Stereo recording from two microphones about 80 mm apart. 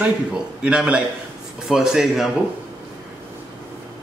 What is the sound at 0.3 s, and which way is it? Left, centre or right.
A man's voice, centre.